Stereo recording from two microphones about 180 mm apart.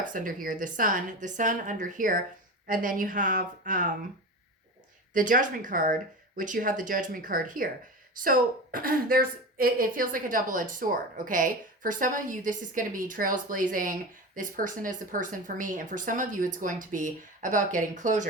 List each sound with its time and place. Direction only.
0.0 s a woman's voice: 50° right (ahead or behind)
5.1 s a woman's voice: 45° right (ahead or behind)